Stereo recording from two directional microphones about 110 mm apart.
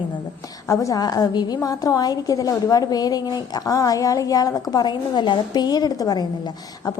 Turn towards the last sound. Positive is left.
turn(degrees=35)  # may be behind; listen again after turning